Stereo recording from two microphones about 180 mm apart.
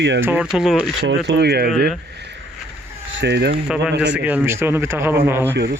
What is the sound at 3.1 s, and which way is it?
Speech, 70° right (ahead or behind).